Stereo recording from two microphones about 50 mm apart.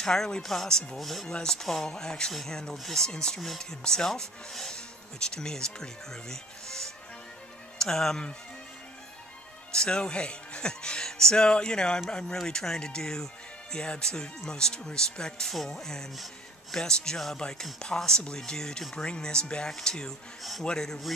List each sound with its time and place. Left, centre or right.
0.0 s speech: centre
9.7 s speech: centre